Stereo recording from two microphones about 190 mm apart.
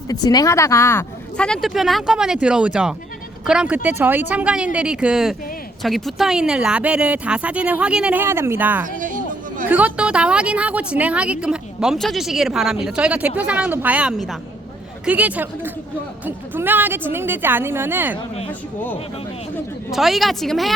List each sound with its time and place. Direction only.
0.1 s a woman's voice: 20° left (ahead or behind); by 8.9 s 10° right (ahead or behind)
9.0 s chatter: 45° right (ahead or behind)
9.6 s a woman's voice: 5° right (ahead or behind)
19.9 s a woman's voice: centre (ahead or behind)